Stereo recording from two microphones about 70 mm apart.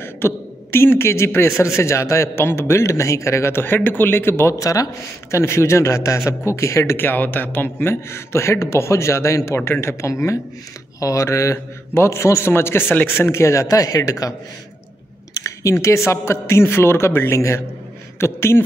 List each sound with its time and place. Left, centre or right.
0.0 s a man's voice: left
4.6 s a man's voice: left
5.3 s a man's voice: left
7.0 s a man's voice: left
15.4 s a sound: left
16.1 s speech: left